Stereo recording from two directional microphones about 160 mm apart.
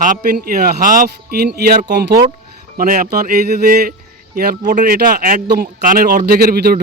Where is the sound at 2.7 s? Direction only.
65° right (ahead or behind).